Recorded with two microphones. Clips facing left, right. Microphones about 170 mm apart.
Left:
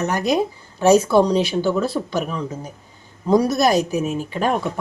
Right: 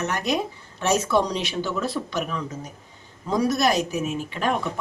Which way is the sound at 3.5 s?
40° left (ahead or behind).